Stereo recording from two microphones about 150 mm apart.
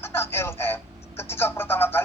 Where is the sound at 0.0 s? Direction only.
15° left (ahead or behind).